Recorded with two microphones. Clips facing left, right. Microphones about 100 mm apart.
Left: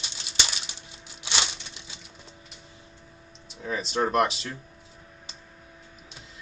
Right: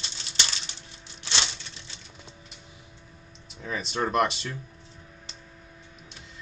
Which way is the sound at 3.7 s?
Centre (ahead or behind).